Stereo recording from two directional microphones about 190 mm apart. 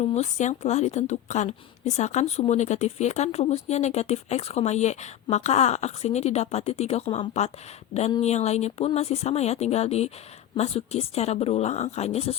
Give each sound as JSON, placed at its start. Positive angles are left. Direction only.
{"t": 0.1, "sound": "a woman's voice", "side_deg": 35}